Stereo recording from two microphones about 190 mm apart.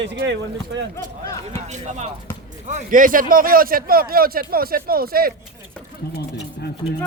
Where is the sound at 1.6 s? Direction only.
35° right (ahead or behind).